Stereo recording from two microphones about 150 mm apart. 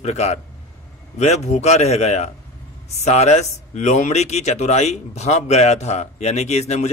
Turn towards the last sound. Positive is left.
turn(degrees=45)  # may be behind; listen again after turning